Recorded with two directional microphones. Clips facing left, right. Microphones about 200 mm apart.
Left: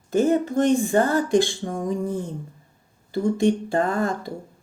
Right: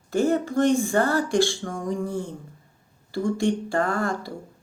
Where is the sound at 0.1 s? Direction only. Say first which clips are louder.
Left 2 dB; 20° left (ahead or behind).